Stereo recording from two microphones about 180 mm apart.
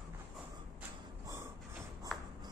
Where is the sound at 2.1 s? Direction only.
Centre (ahead or behind).